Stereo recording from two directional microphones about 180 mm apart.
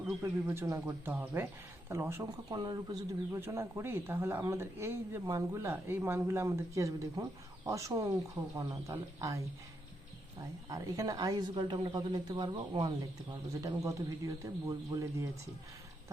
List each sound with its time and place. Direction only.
0.2 s a woman's voice: 15° right (ahead or behind)
10.7 s a woman's voice: 20° right (ahead or behind)